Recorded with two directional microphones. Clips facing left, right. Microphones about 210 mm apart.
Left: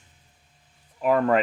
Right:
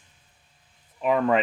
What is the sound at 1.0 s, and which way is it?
Speech, centre (ahead or behind).